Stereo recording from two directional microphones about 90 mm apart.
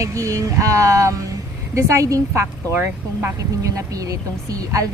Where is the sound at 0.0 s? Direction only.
35° right (ahead or behind).